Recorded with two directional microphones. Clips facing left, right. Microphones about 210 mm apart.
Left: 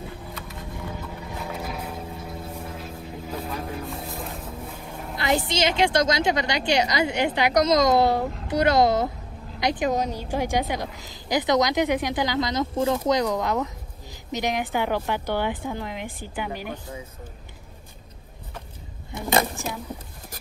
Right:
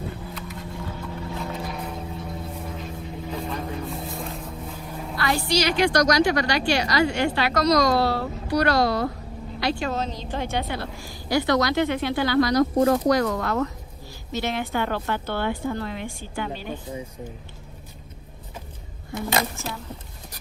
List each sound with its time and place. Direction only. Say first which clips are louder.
0.3 s vehicle: right 2 dB; centre (ahead or behind)
5.1 s a woman's voice: even; 20° left (ahead or behind)
12.7 s speech: right 4 dB; 50° right (ahead or behind)
13.1 s a woman's voice: right 1 dB; 20° left (ahead or behind)
19.3 s a woman's voice: left 4 dB; 15° left (ahead or behind)